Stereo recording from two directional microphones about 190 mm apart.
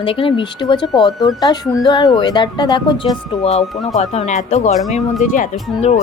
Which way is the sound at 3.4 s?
35° left (ahead or behind).